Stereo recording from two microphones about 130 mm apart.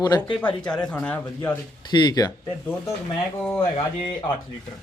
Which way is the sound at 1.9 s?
30° left (ahead or behind).